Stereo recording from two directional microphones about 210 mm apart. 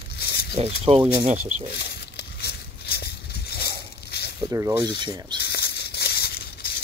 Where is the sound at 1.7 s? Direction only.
50° left (ahead or behind).